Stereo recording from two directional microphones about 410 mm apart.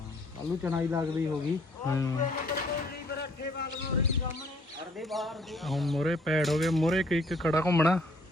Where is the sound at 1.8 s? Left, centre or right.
Centre.